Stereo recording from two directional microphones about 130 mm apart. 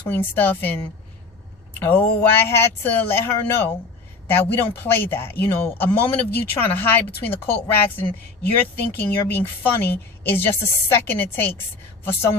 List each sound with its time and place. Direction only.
0.1 s speech: 15° left (ahead or behind)
1.8 s speech: 15° left (ahead or behind)